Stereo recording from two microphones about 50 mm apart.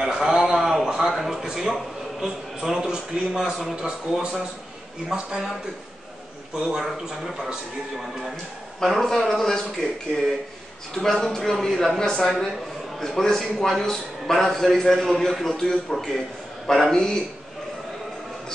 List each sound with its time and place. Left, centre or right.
0.0 s a man's voice: centre
6.5 s a man's voice: centre
8.7 s a man's voice: centre
16.9 s a man's voice: centre